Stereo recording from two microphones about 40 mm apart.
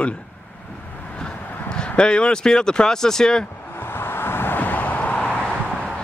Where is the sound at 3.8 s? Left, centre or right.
Left.